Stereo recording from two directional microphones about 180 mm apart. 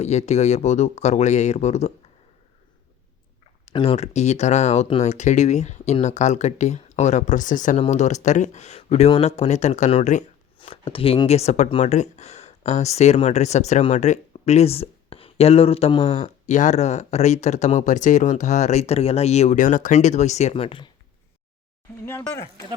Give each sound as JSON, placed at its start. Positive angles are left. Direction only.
{"t": 0.0, "sound": "speech", "side_deg": 40}
{"t": 3.7, "sound": "speech", "side_deg": 35}
{"t": 22.0, "sound": "speech", "side_deg": 15}